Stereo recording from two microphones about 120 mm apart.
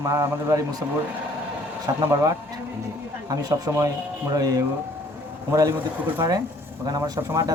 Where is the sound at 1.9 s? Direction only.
30° right (ahead or behind).